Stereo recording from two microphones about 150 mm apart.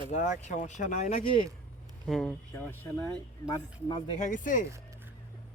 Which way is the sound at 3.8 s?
30° left (ahead or behind).